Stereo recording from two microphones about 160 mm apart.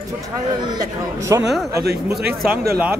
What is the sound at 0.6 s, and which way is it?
Speech, 25° right (ahead or behind).